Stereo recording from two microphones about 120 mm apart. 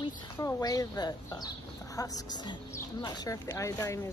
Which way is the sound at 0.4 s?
30° left (ahead or behind).